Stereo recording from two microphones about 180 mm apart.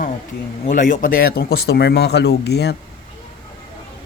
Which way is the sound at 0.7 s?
45° left (ahead or behind).